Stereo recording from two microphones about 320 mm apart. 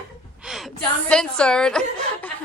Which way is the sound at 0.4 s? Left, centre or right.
Centre.